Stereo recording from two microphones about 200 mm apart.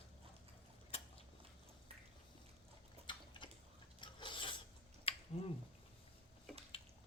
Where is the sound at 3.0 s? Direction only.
25° left (ahead or behind).